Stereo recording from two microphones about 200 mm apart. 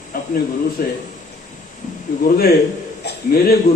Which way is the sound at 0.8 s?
45° left (ahead or behind).